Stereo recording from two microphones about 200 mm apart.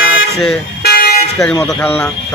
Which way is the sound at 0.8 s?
50° left (ahead or behind).